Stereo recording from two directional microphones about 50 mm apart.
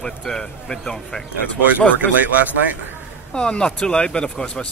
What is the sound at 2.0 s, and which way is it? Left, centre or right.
Speech, right.